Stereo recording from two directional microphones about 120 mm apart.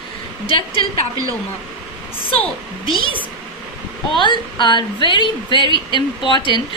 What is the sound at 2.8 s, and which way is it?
Speech, 45° left (ahead or behind).